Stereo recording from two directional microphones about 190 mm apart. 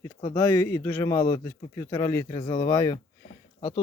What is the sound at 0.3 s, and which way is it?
A man's voice, 10° left (ahead or behind).